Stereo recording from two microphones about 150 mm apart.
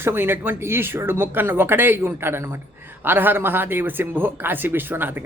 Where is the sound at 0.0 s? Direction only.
15° right (ahead or behind).